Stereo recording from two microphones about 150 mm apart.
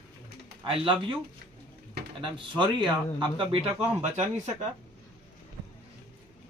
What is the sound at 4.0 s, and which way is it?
Speech, 50° right (ahead or behind).